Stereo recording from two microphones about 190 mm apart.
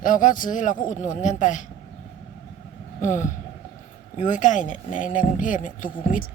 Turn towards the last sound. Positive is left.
turn(degrees=45)  # may be behind; listen again after turning